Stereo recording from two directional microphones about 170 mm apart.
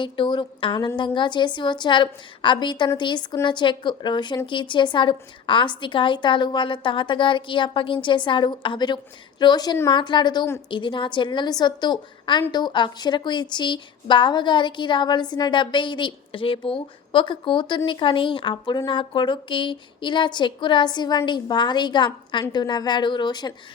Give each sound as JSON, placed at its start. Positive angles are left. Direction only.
{"t": 0.0, "sound": "a woman's voice", "side_deg": 30}